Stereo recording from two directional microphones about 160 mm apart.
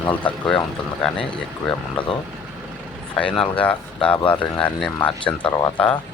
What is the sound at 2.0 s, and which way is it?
Speech, 5° left (ahead or behind).